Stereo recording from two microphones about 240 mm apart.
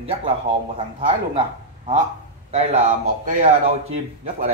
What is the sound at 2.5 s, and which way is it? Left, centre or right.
Speech, right.